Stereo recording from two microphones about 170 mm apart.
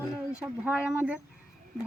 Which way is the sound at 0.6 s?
5° right (ahead or behind).